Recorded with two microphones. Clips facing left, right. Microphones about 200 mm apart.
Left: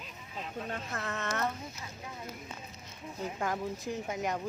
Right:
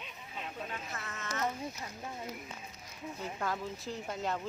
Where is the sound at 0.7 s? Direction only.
55° left (ahead or behind).